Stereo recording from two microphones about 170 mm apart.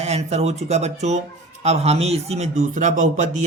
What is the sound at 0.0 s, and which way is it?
A man's voice, 40° right (ahead or behind).